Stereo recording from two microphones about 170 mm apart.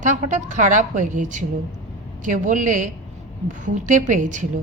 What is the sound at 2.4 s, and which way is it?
A woman's voice, 50° right (ahead or behind).